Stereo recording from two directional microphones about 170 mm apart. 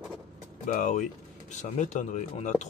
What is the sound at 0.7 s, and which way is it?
Speech, 45° left (ahead or behind).